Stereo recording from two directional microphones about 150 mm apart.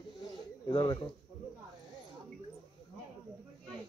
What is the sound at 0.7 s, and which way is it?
Speech, 30° left (ahead or behind).